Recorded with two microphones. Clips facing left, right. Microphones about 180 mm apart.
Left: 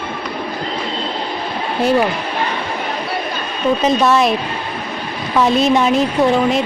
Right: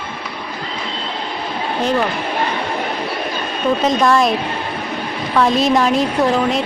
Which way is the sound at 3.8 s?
5° left (ahead or behind).